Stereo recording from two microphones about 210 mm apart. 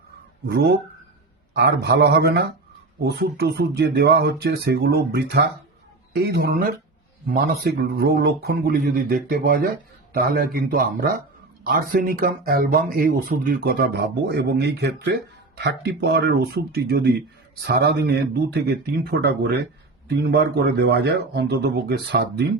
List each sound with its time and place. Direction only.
0.4 s speech: 50° right (ahead or behind)